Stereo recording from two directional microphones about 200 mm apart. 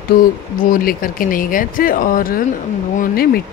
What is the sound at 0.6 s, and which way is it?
Speech, 45° left (ahead or behind).